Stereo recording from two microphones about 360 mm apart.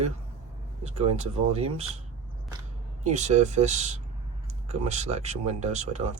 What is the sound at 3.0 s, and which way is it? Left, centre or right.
Speech, centre.